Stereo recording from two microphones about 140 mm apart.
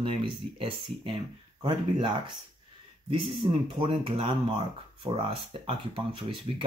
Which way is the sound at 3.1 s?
40° right (ahead or behind).